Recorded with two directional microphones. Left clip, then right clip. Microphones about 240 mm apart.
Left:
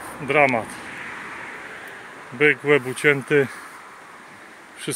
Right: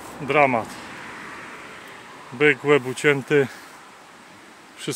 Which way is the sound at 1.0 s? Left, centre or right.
Right.